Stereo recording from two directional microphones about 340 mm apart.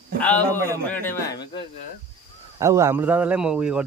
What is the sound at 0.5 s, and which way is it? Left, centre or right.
Speech, centre.